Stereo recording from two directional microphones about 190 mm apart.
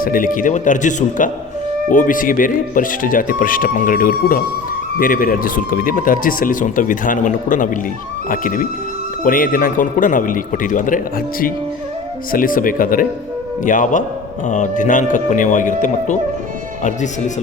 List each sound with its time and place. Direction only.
0.0 s speech: 45° left (ahead or behind)